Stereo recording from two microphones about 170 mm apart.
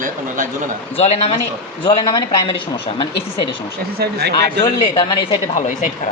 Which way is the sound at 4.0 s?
65° right (ahead or behind).